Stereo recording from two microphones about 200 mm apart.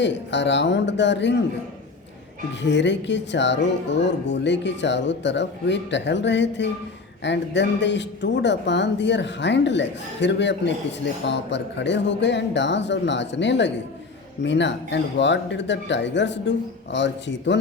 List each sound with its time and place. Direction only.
0.0 s speech: 60° left (ahead or behind)
2.6 s speech: 60° left (ahead or behind)